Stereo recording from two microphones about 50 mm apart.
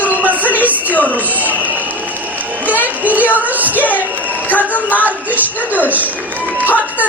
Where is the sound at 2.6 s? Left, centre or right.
Right.